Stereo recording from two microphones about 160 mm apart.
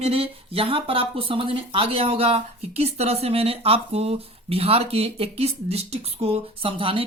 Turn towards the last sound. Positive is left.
turn(degrees=-35)  # may be behind; listen again after turning